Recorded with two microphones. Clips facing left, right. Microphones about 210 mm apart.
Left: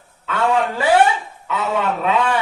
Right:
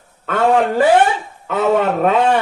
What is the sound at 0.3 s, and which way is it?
A man's voice, 50° right (ahead or behind).